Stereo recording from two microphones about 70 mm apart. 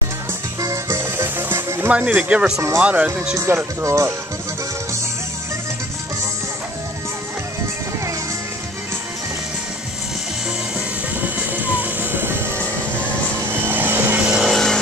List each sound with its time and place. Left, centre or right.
0.8 s music: right
1.9 s speech: centre
3.3 s speech: right
11.2 s music: right
13.5 s vehicle: right
14.2 s vehicle: centre
14.5 s vehicle: centre